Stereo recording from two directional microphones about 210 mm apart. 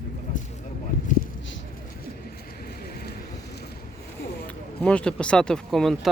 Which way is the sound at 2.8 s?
45° left (ahead or behind).